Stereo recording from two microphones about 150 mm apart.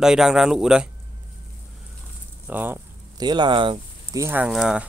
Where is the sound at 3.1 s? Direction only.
30° right (ahead or behind).